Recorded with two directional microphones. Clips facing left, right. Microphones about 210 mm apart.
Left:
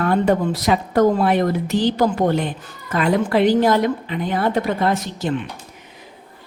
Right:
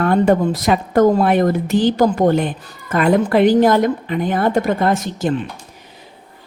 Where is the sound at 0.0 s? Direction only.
50° right (ahead or behind).